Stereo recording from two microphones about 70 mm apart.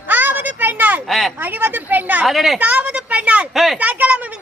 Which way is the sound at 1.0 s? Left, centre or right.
Centre.